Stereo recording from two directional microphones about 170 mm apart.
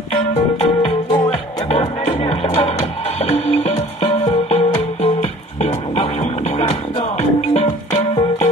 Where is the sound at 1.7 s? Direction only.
40° left (ahead or behind).